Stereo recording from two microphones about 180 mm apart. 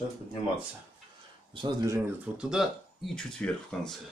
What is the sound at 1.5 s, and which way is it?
Speech, 20° right (ahead or behind).